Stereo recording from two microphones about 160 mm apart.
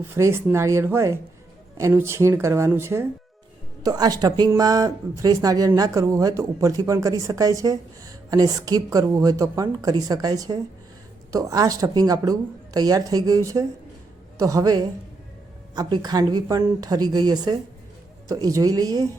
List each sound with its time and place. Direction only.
0.0 s speech: 15° right (ahead or behind)